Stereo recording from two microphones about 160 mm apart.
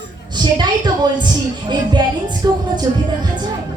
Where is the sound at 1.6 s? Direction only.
30° right (ahead or behind).